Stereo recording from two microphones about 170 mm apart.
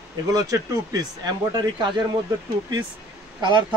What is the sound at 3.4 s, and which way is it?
Speech, 25° right (ahead or behind).